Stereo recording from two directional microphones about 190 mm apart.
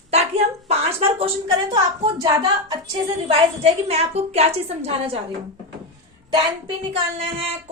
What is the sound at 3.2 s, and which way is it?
A woman's voice, 30° right (ahead or behind).